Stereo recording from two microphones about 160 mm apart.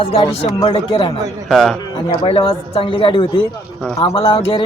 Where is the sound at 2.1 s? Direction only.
35° left (ahead or behind).